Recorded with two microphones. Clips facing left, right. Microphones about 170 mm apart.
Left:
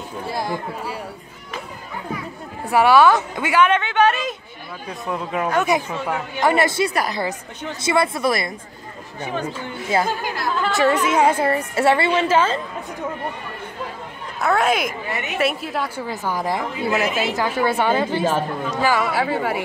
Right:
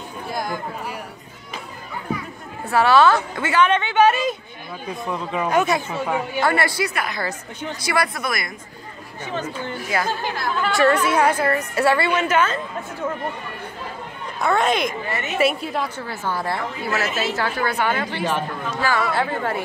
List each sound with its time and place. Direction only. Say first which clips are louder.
0.3 s speech: left 1 dB; 30° left (ahead or behind)
2.6 s a woman's voice: left 2 dB; 15° left (ahead or behind)
5.9 s a woman's voice: right 1 dB; 10° right (ahead or behind)
6.4 s a woman's voice: left 5 dB; 20° left (ahead or behind)
9.2 s a woman's voice: left 1 dB; 15° left (ahead or behind); by 12.5 s 30° left (ahead or behind)
14.4 s speech: left 1 dB; 5° left (ahead or behind)
16.0 s a woman's voice: left 2 dB; 15° left (ahead or behind)